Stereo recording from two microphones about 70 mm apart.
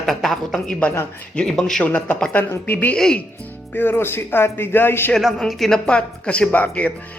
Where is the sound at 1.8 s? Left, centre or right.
Left.